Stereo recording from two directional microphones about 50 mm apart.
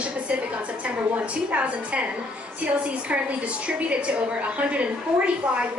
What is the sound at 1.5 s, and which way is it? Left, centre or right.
Speech, right.